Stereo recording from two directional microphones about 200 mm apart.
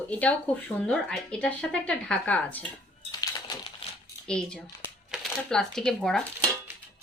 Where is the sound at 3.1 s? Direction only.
20° left (ahead or behind).